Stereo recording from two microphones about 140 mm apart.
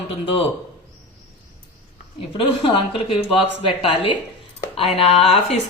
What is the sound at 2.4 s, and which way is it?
A woman's voice, 40° left (ahead or behind).